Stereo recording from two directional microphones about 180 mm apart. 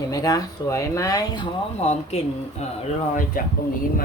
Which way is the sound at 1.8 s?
35° left (ahead or behind).